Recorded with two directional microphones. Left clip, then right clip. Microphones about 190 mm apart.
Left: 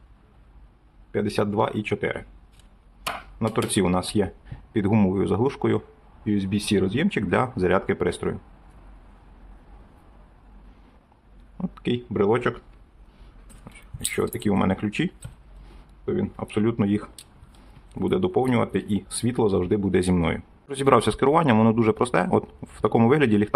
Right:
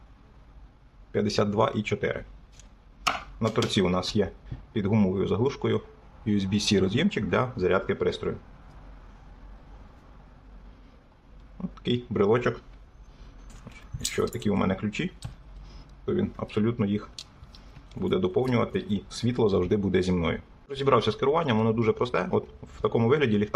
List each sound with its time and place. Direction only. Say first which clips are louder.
1.1 s speech: left 1 dB; 10° left (ahead or behind)
3.3 s speech: left 2 dB; 15° left (ahead or behind)
6.2 s speech: left 1 dB; 10° left (ahead or behind)
7.2 s speech: left 6 dB; 20° left (ahead or behind)
11.5 s a sound: left 2 dB; 20° left (ahead or behind)
14.0 s speech: left 2 dB; 15° left (ahead or behind)
16.0 s speech: left 2 dB; 10° left (ahead or behind); by 23.6 s 25° left (ahead or behind)